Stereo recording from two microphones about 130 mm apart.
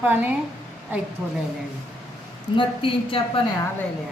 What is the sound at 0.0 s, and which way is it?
Speech, 15° right (ahead or behind).